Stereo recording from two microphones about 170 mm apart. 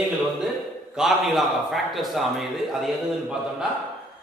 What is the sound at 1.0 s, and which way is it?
A man's voice, centre (ahead or behind).